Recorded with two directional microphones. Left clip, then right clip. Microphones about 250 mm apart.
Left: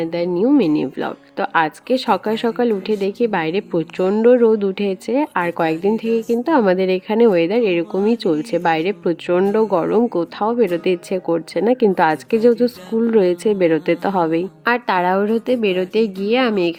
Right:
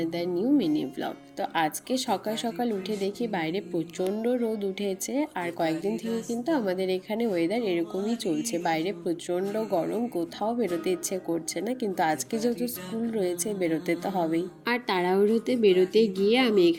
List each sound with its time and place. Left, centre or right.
0.0 s speech: left